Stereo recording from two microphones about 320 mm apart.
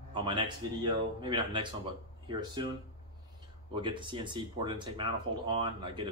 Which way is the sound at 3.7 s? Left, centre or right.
Centre.